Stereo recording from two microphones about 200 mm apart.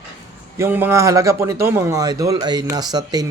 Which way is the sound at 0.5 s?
10° right (ahead or behind).